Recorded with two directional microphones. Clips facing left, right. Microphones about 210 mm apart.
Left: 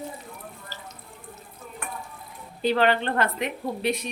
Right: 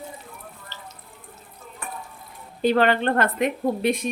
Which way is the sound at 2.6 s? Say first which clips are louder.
Right 3 dB; 50° right (ahead or behind).